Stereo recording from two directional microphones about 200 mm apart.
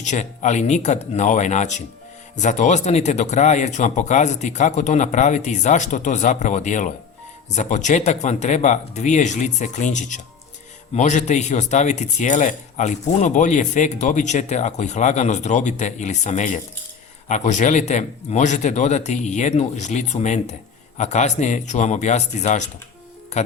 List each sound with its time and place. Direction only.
0.0 s speech: 35° left (ahead or behind)